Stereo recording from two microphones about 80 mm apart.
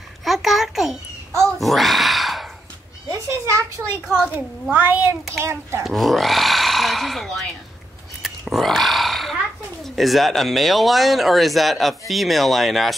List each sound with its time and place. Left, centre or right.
0.2 s a sound: centre
3.1 s a sound: right
4.6 s speech: right
5.4 s a child's voice: right
5.9 s speech: centre
8.2 s roar: centre
9.8 s speech: centre